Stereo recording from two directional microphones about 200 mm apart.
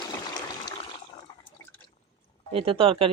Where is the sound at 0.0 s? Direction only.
20° left (ahead or behind).